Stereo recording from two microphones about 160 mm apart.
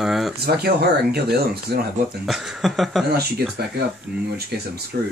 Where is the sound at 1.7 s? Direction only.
90° right.